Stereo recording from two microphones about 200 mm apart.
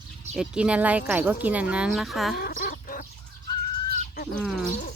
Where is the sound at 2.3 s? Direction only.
50° left (ahead or behind).